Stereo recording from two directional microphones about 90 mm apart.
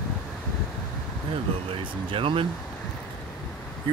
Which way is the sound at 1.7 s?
80° right.